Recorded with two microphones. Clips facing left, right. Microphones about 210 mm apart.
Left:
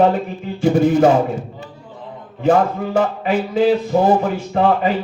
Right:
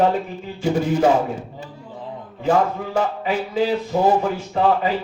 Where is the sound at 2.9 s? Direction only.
50° left (ahead or behind).